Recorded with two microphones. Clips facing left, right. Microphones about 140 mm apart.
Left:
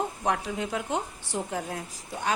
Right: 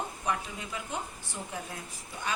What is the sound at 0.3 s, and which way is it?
A woman's voice, 75° left (ahead or behind).